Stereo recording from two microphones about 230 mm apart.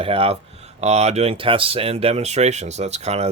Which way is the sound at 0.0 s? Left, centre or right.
Right.